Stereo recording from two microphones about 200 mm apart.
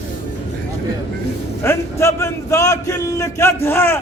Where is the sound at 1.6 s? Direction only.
15° left (ahead or behind).